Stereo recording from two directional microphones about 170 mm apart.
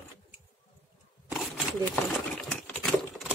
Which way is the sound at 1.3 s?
5° left (ahead or behind).